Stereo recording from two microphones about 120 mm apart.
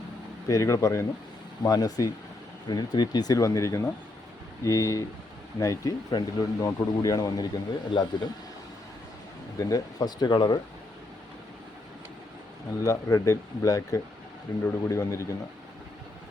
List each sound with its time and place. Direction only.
0.4 s speech: 30° left (ahead or behind)
9.6 s speech: 30° left (ahead or behind)
12.8 s speech: 30° left (ahead or behind)